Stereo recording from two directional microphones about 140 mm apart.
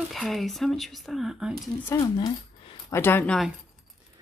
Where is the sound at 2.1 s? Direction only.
35° left (ahead or behind).